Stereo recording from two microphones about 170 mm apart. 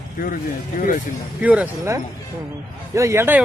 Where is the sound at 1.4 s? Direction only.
10° right (ahead or behind).